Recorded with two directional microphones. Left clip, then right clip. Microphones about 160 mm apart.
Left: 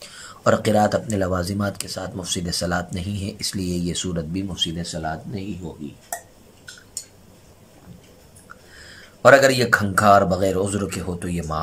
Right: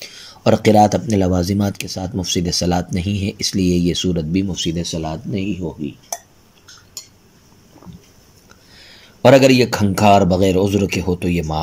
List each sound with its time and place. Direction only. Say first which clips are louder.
0.0 s speech: right 3 dB; 15° right (ahead or behind)
8.7 s speech: even; 20° right (ahead or behind)